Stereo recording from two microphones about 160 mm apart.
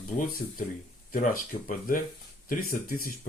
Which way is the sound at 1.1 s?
55° left (ahead or behind).